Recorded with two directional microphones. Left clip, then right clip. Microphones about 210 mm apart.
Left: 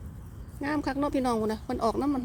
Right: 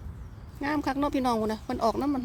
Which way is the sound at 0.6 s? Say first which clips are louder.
Right 1 dB; centre (ahead or behind).